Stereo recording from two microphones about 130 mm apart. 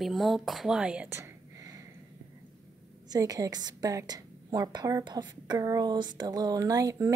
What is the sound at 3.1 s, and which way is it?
A woman's voice, 25° right (ahead or behind).